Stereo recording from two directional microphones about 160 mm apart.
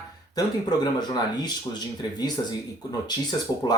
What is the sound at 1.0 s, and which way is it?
Speech, 25° left (ahead or behind).